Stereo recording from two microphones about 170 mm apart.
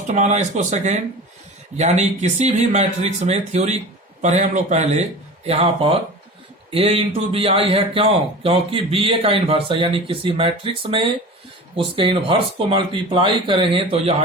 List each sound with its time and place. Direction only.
0.1 s speech: 45° right (ahead or behind)